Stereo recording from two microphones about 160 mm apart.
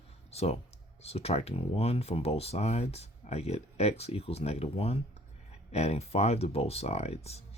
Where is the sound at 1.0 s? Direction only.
40° left (ahead or behind).